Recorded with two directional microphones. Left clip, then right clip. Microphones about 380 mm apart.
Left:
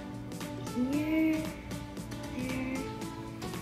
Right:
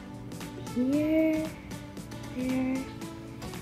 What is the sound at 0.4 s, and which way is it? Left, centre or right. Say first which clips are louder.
Music: right 3 dB; centre.